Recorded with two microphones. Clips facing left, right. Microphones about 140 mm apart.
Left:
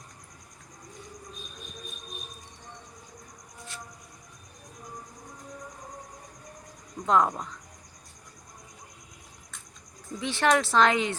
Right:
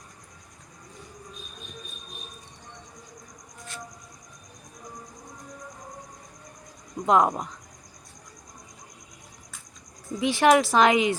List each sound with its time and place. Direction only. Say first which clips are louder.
7.0 s speech: right 3 dB; 15° right (ahead or behind)
10.2 s speech: right 5 dB; 10° right (ahead or behind)